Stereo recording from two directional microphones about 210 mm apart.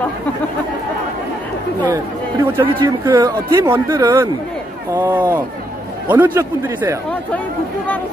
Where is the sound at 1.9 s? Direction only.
15° right (ahead or behind).